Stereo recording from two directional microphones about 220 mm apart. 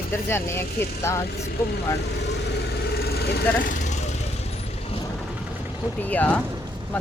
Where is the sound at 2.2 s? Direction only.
50° left (ahead or behind); by 4.1 s 30° left (ahead or behind).